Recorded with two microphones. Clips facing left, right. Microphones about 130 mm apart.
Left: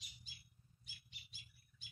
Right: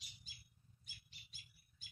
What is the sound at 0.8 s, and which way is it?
Bird, 45° right (ahead or behind).